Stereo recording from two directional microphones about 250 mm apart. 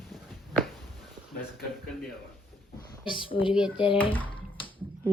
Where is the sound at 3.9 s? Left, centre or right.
Centre.